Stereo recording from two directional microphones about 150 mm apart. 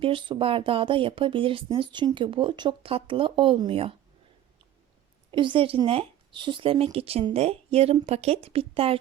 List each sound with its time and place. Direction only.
0.0 s speech: 35° right (ahead or behind)
5.3 s speech: 35° right (ahead or behind)